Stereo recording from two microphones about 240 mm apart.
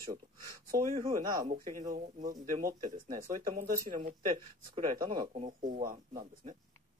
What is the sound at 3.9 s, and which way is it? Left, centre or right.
Speech, right.